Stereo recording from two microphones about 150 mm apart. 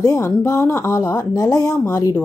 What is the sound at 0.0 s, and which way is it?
A woman's voice, 25° left (ahead or behind).